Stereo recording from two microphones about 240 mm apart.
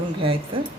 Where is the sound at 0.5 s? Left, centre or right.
Right.